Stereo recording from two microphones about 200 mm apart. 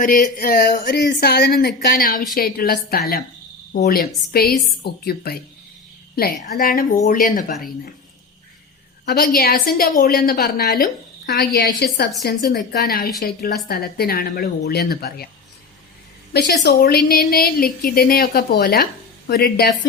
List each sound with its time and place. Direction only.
0.0 s a woman's voice: 45° left (ahead or behind)
9.0 s a woman's voice: 45° left (ahead or behind)
16.3 s a woman's voice: 55° left (ahead or behind)